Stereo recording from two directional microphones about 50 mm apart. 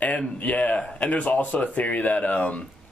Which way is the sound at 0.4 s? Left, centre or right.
Left.